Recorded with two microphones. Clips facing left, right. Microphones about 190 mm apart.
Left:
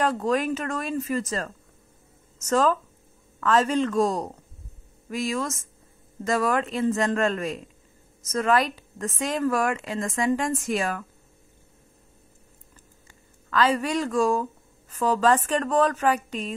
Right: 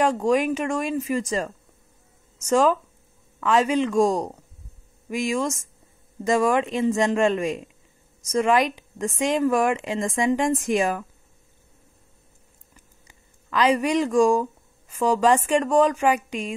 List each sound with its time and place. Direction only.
0.0 s a woman's voice: 10° right (ahead or behind)
13.5 s a woman's voice: 15° right (ahead or behind)